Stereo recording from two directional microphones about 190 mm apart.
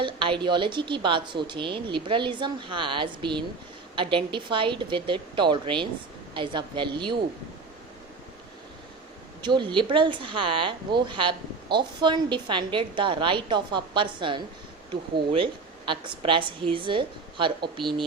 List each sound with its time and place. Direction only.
0.0 s a woman's voice: 25° right (ahead or behind)
9.4 s a woman's voice: 25° right (ahead or behind)